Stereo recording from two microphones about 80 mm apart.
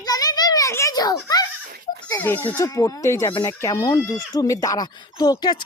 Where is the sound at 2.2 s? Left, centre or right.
Left.